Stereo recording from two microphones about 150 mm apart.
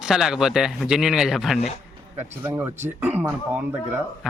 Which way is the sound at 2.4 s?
15° right (ahead or behind).